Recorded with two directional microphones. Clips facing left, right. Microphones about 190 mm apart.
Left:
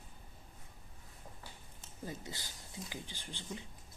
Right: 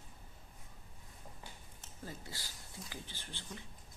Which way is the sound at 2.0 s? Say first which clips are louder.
Left 3 dB; 20° left (ahead or behind).